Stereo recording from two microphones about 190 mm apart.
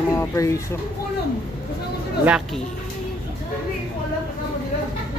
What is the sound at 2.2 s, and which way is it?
Speech, 5° right (ahead or behind).